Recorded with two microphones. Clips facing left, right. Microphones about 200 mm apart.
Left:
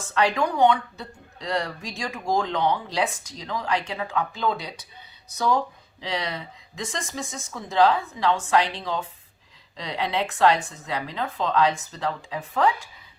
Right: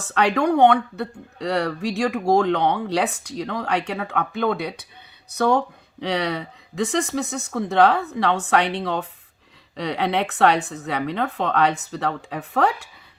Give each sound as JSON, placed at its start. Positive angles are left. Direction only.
{"t": 0.0, "sound": "speech", "side_deg": -65}